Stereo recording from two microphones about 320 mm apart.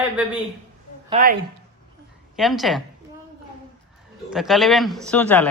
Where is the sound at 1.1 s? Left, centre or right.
Right.